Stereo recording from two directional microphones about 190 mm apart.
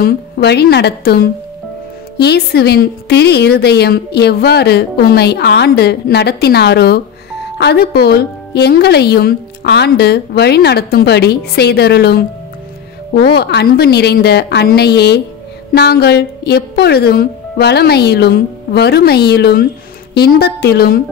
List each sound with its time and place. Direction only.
0.0 s a woman's voice: 60° left (ahead or behind)